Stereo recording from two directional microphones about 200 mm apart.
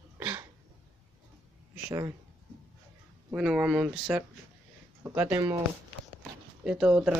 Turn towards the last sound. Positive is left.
turn(degrees=-5)  # may be behind; listen again after turning